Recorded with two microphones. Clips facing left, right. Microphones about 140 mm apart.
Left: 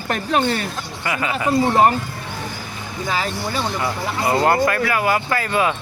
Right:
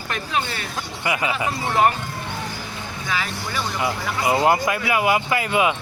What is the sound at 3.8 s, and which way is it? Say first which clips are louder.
Speech: left 1 dB; 10° right (ahead or behind).